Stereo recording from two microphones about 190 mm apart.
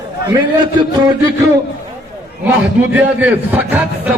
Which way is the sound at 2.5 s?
10° right (ahead or behind).